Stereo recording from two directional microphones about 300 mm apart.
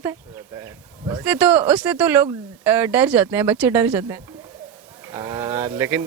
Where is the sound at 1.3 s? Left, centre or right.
Centre.